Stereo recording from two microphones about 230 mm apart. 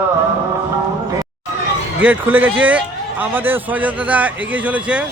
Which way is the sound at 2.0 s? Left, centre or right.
Centre.